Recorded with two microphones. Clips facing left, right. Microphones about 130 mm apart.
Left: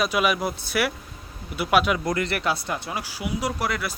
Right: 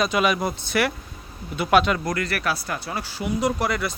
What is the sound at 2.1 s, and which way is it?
Speech, 25° left (ahead or behind).